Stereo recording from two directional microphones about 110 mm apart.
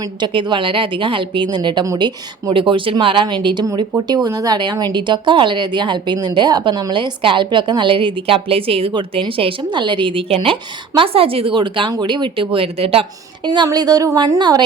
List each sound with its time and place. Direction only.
0.0 s speech: 45° right (ahead or behind); by 13.1 s 60° right (ahead or behind)
13.4 s speech: 45° right (ahead or behind)
14.3 s speech: 45° right (ahead or behind)